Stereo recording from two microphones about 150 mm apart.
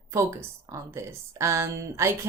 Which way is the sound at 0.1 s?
20° right (ahead or behind).